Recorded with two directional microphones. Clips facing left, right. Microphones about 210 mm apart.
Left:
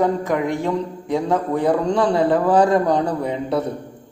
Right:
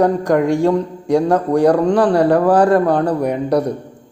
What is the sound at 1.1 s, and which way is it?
Speech, 80° right.